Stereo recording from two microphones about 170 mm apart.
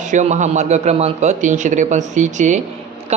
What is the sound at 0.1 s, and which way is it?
A man's voice, 45° right (ahead or behind).